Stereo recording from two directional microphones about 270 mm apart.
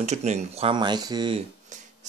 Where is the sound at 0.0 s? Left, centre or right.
Right.